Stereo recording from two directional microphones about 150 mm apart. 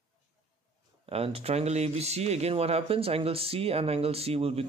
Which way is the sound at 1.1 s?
40° right (ahead or behind).